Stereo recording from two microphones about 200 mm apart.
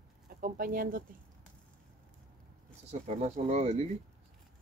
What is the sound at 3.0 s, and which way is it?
Speech, 35° right (ahead or behind).